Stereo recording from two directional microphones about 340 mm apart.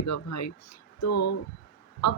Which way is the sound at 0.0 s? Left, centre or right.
Left.